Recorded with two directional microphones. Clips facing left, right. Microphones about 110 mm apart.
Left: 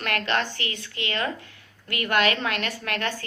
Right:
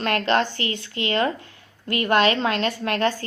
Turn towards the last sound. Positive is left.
turn(degrees=-30)  # may be behind; listen again after turning